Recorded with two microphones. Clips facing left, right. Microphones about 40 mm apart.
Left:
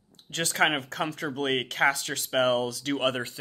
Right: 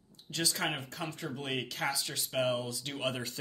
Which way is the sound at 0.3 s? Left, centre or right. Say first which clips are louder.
Left 8 dB; left.